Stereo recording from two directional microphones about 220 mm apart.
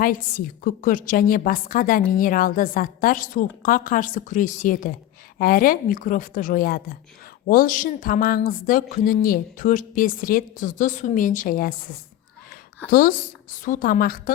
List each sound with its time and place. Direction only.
0.0 s a woman's voice: 40° left (ahead or behind)
12.9 s a woman's voice: 40° left (ahead or behind)